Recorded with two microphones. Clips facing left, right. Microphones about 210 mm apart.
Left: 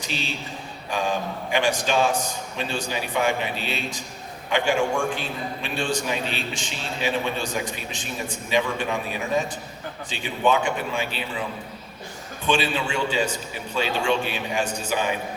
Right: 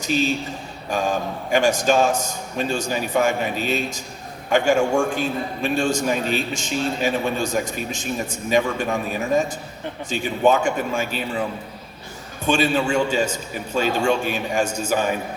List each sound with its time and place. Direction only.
0.0 s a man's voice: 45° right (ahead or behind)
12.5 s a man's voice: 45° right (ahead or behind)